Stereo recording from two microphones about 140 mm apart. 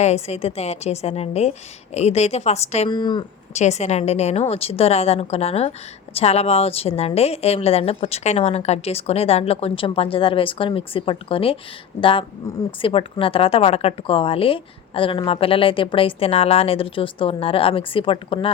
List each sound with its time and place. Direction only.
0.0 s a woman's voice: 50° left (ahead or behind)
2.9 s a woman's voice: 30° left (ahead or behind)
3.5 s a woman's voice: 55° left (ahead or behind); by 18.3 s 40° left (ahead or behind)